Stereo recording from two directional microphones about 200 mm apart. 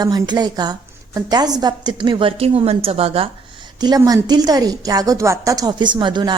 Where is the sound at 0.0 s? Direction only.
20° right (ahead or behind).